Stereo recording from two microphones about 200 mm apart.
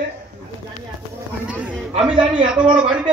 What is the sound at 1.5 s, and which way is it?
Speech, 5° right (ahead or behind).